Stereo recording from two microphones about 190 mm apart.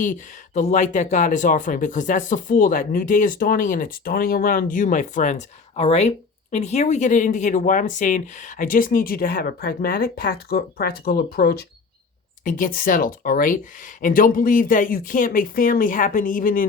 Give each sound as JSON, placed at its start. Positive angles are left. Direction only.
{"t": 0.0, "sound": "speech", "side_deg": 40}